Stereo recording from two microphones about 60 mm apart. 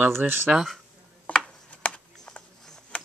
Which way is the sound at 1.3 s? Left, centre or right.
Left.